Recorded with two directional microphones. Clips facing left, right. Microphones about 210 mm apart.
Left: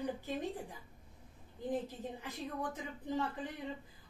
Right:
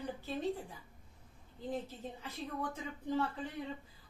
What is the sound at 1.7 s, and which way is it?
Speech, 15° left (ahead or behind).